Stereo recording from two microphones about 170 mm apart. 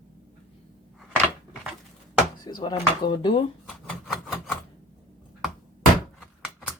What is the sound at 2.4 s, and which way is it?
Speech, 25° left (ahead or behind).